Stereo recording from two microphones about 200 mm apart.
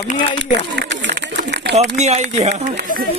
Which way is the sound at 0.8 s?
60° right (ahead or behind).